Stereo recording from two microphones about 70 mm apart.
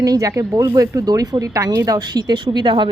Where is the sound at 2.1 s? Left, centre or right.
Right.